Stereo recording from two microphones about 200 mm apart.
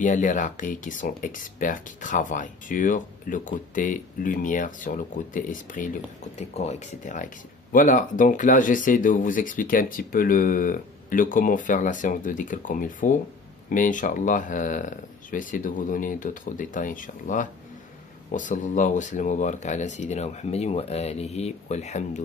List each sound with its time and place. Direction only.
0.0 s speech: 40° left (ahead or behind)